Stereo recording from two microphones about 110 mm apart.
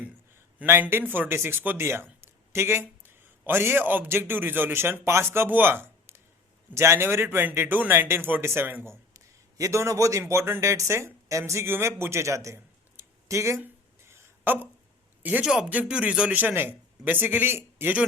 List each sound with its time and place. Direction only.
0.0 s a man's voice: 20° right (ahead or behind)
13.2 s a sound: 25° right (ahead or behind)
15.2 s a man's voice: 10° right (ahead or behind)